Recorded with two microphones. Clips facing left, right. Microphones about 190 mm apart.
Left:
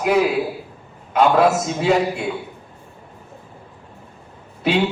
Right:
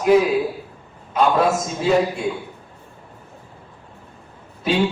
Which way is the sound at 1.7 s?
65° left (ahead or behind).